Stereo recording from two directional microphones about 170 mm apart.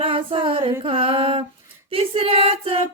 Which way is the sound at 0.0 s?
30° right (ahead or behind).